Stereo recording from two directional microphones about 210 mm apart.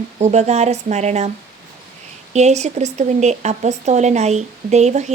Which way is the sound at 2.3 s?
35° right (ahead or behind).